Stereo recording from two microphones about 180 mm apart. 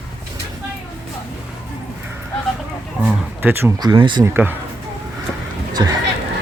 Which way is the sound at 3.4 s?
10° right (ahead or behind).